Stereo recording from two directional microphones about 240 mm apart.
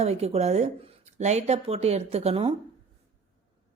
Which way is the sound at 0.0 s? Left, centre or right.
Right.